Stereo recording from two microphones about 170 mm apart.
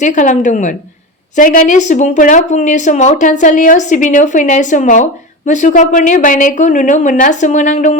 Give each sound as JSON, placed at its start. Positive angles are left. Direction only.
{"t": 0.0, "sound": "a woman's voice", "side_deg": 45}